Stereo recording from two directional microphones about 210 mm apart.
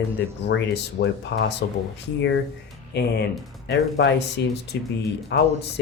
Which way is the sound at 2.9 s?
55° left (ahead or behind).